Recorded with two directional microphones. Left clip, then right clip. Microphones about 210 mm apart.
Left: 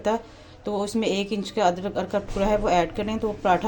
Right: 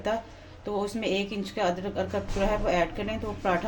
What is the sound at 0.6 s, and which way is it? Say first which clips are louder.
A woman's voice: left 4 dB; 30° left (ahead or behind).